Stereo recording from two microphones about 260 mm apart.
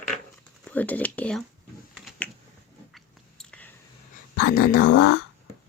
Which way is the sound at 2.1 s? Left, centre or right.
Centre.